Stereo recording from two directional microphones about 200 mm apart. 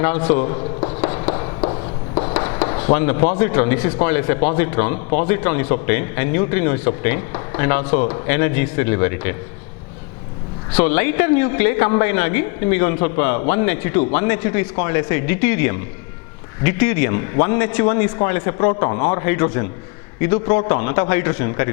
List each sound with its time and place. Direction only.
0.0 s a man's voice: 10° left (ahead or behind)
0.5 s a sound: 30° left (ahead or behind)
2.3 s a man's voice: 15° left (ahead or behind)
10.7 s a man's voice: 10° left (ahead or behind)